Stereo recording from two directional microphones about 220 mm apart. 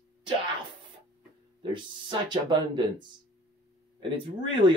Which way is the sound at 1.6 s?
20° right (ahead or behind).